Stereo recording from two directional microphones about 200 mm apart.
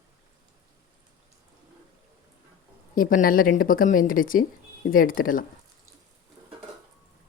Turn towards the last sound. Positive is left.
turn(degrees=45)  # may be behind; listen again after turning